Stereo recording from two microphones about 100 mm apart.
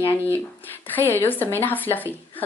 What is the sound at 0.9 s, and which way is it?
Speech, 20° left (ahead or behind).